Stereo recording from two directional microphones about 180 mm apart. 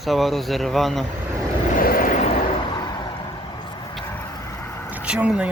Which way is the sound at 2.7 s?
25° left (ahead or behind).